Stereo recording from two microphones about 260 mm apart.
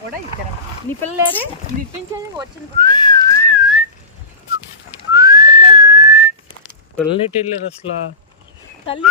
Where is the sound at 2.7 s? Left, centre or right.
Centre.